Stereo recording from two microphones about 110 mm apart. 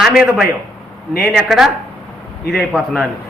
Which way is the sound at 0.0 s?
5° right (ahead or behind).